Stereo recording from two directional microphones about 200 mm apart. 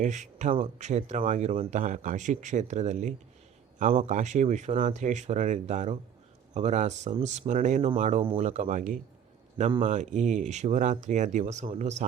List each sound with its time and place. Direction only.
0.0 s speech: 35° right (ahead or behind)
8.2 s speech: 25° right (ahead or behind)
8.4 s speech: 35° right (ahead or behind)